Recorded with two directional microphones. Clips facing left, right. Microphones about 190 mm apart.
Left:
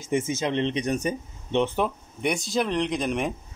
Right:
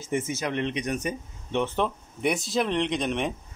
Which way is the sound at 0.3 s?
25° left (ahead or behind).